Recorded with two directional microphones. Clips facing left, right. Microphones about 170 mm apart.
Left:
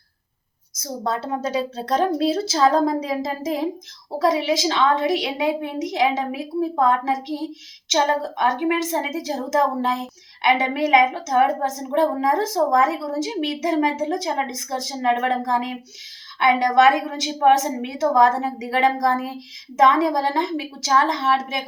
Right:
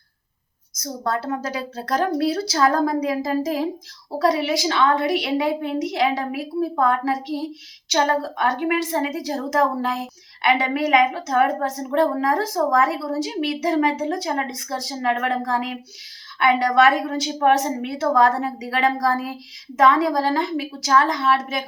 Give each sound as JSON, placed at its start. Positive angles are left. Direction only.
{"t": 1.0, "sound": "a woman's voice", "side_deg": 25}